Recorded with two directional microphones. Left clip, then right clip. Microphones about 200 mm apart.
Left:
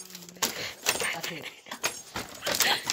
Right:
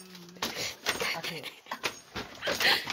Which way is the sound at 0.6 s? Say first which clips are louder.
Even; 10° right (ahead or behind).